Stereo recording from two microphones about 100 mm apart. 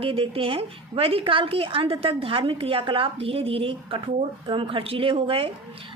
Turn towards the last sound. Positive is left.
turn(degrees=-65)  # may be behind; listen again after turning